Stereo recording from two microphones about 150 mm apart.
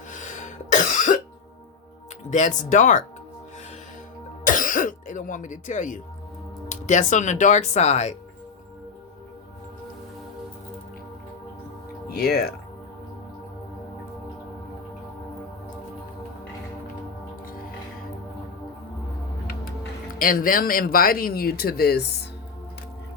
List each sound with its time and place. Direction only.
0.1 s cough: 55° left (ahead or behind)
2.3 s speech: 55° left (ahead or behind)
4.4 s music: 60° left (ahead or behind)
6.7 s speech: 55° left (ahead or behind)
12.1 s speech: 90° left
20.1 s speech: 70° left (ahead or behind); by 22.3 s 90° left